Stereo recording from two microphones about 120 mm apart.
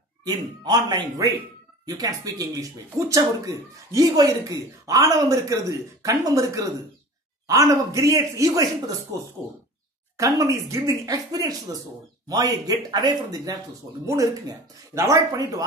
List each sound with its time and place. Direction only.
0.2 s speech: 35° right (ahead or behind)
10.1 s speech: 25° right (ahead or behind)